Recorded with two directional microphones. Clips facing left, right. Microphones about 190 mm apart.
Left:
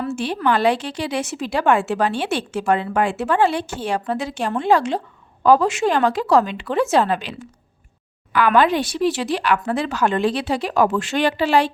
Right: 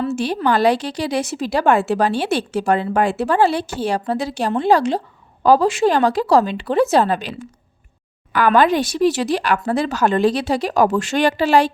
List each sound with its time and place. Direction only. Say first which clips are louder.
0.4 s a woman's voice: right 2 dB; 40° right (ahead or behind)